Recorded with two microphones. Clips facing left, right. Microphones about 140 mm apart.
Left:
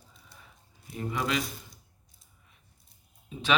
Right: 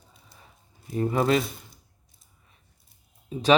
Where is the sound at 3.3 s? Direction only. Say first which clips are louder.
Right 7 dB; 40° right (ahead or behind).